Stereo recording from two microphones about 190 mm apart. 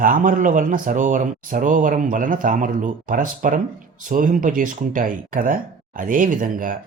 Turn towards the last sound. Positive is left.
turn(degrees=-45)  # may be behind; listen again after turning